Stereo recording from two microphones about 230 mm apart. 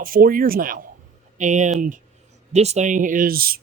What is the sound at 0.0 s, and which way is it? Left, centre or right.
Speech, right.